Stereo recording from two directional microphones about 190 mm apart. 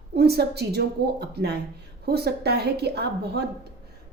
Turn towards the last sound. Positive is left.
turn(degrees=-60)  # may be behind; listen again after turning